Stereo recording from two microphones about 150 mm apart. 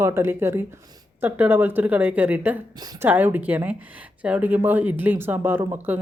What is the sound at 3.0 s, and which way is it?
Speech, 15° right (ahead or behind).